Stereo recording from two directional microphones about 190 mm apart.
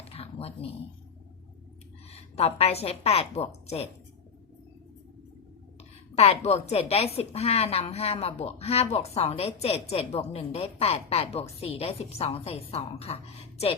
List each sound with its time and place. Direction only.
0.0 s a sound: 30° left (ahead or behind)
2.1 s a woman's voice: 30° left (ahead or behind)
6.1 s a woman's voice: 30° left (ahead or behind)